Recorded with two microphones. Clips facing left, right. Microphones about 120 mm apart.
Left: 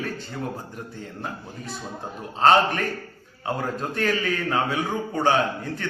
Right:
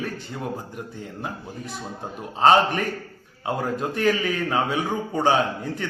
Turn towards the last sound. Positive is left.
turn(degrees=-15)  # may be behind; listen again after turning